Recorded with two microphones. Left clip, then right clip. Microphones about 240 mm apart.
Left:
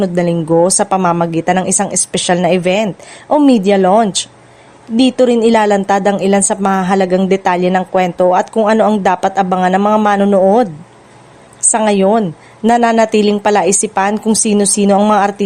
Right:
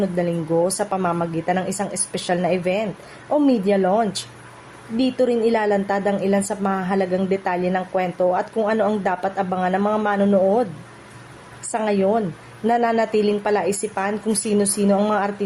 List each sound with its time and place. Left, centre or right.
0.0 s a woman's voice: left
11.7 s a woman's voice: left